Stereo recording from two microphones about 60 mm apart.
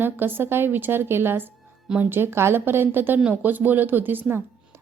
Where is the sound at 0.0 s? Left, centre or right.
Right.